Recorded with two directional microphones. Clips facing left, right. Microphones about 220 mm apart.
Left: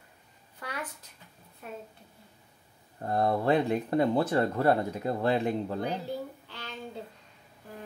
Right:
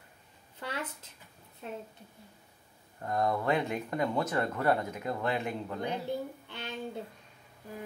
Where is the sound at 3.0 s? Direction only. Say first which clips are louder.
Left 3 dB; 30° left (ahead or behind).